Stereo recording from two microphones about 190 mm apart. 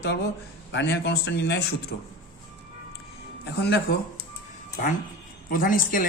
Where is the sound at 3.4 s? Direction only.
60° left (ahead or behind).